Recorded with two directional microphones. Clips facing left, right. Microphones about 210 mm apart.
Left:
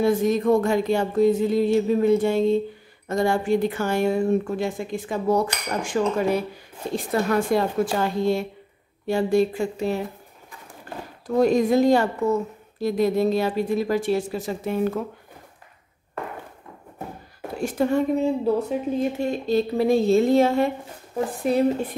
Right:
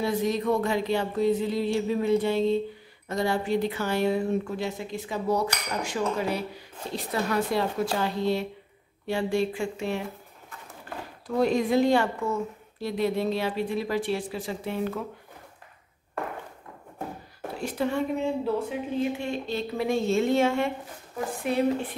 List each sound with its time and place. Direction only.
0.0 s speech: 50° left (ahead or behind)
11.2 s speech: 45° left (ahead or behind)
17.6 s speech: 45° left (ahead or behind)